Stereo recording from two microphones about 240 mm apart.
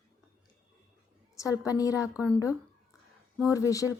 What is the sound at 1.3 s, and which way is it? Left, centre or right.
A woman's voice, centre.